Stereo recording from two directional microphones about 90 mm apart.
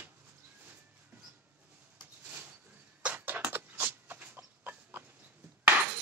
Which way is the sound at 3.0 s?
15° right (ahead or behind).